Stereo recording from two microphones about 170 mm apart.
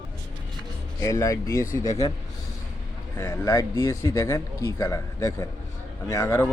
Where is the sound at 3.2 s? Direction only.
20° left (ahead or behind).